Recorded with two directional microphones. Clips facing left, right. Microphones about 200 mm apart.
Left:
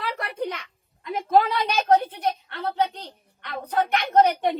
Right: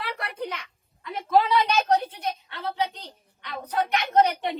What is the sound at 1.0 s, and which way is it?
A woman's voice, 50° left (ahead or behind).